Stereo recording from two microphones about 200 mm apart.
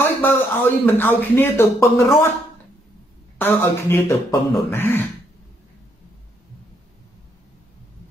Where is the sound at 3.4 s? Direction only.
10° left (ahead or behind).